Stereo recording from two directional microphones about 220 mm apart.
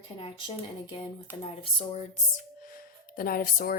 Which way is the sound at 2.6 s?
40° left (ahead or behind).